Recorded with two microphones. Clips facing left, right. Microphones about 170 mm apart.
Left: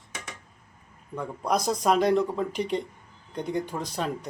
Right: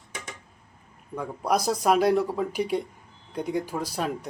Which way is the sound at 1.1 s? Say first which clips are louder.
Right 1 dB; 5° right (ahead or behind).